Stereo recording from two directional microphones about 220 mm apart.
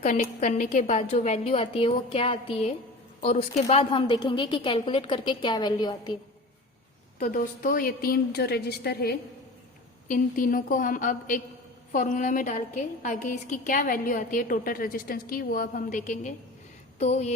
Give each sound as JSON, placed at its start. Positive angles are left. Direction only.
{"t": 0.0, "sound": "a woman's voice", "side_deg": 30}
{"t": 7.2, "sound": "a woman's voice", "side_deg": 40}